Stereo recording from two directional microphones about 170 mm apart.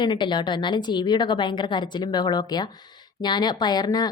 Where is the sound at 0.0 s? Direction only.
25° left (ahead or behind).